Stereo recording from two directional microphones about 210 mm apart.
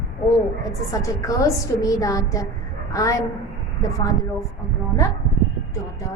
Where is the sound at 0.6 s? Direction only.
15° left (ahead or behind).